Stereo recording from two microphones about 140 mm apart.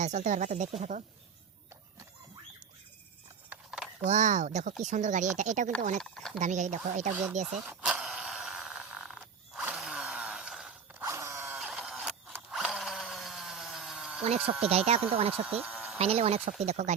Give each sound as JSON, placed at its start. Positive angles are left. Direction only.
{"t": 0.0, "sound": "speech", "side_deg": -55}
{"t": 3.5, "sound": "a sound", "side_deg": -5}
{"t": 4.0, "sound": "speech", "side_deg": -55}
{"t": 6.0, "sound": "speech", "side_deg": 5}
{"t": 6.4, "sound": "speech", "side_deg": -60}
{"t": 7.1, "sound": "speech", "side_deg": -15}
{"t": 7.4, "sound": "a sound", "side_deg": -5}
{"t": 11.0, "sound": "ratchet", "side_deg": -20}
{"t": 11.6, "sound": "printer", "side_deg": 0}
{"t": 12.5, "sound": "drill", "side_deg": -5}
{"t": 14.7, "sound": "speech", "side_deg": -45}
{"t": 15.3, "sound": "speech", "side_deg": -10}
{"t": 16.0, "sound": "speech", "side_deg": -45}